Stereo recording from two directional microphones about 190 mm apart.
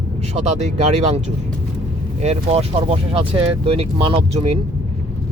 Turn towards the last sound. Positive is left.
turn(degrees=-30)  # may be behind; listen again after turning